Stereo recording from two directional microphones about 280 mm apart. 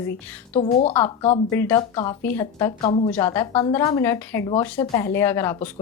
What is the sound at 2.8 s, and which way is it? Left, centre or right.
Speech, left.